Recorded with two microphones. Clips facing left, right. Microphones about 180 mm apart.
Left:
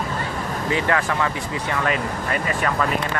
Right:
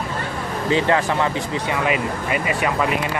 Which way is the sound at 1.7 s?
10° right (ahead or behind).